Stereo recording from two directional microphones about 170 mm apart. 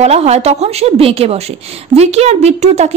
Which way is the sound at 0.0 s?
40° right (ahead or behind).